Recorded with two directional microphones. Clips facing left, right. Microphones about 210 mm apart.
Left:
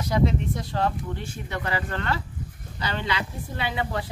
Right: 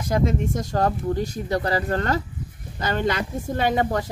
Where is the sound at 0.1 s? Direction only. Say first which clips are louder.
Right 2 dB; 45° right (ahead or behind).